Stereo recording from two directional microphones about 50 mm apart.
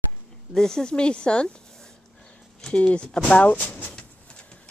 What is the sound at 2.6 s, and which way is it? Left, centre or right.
Speech, left.